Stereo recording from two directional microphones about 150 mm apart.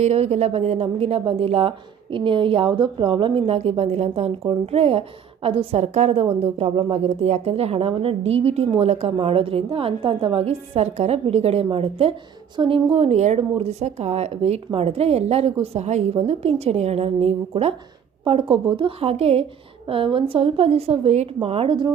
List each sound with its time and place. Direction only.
0.0 s a woman's voice: 45° right (ahead or behind)